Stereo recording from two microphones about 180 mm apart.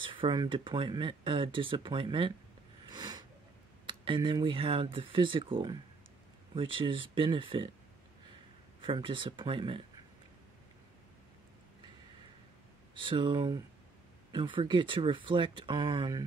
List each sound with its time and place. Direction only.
0.0 s speech: 30° right (ahead or behind)
2.8 s a sound: 25° right (ahead or behind)
3.8 s speech: 30° right (ahead or behind)
8.8 s speech: 30° right (ahead or behind)
12.9 s speech: 25° right (ahead or behind)